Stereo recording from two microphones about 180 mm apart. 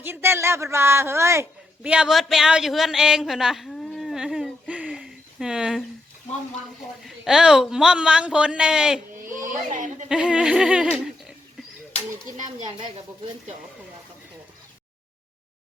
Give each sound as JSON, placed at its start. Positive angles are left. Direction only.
{"t": 0.0, "sound": "a man's voice", "side_deg": -15}
{"t": 7.0, "sound": "a woman's voice", "side_deg": -5}
{"t": 9.2, "sound": "speech", "side_deg": -45}
{"t": 10.1, "sound": "a woman's voice", "side_deg": -5}